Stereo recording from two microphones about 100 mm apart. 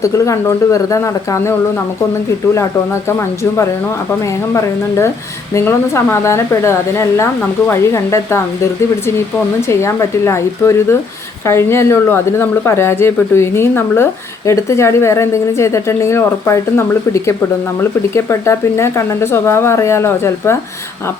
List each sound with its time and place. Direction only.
0.0 s speech: 30° left (ahead or behind)
2.6 s speech: 30° left (ahead or behind)
18.1 s speech: 25° left (ahead or behind)